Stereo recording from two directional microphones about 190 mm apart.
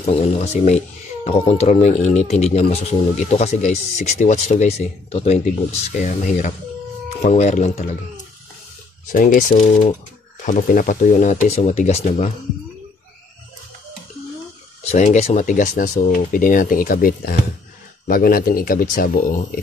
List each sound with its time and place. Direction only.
0.0 s speech: 35° left (ahead or behind)
9.1 s speech: 45° left (ahead or behind)
14.9 s speech: 40° left (ahead or behind)